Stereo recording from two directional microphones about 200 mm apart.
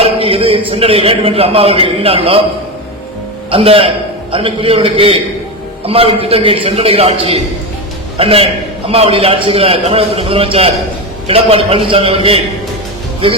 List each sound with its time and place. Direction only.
0.0 s a sound: 30° right (ahead or behind)
0.7 s a man's voice: 30° right (ahead or behind)
3.5 s a man's voice: 25° right (ahead or behind)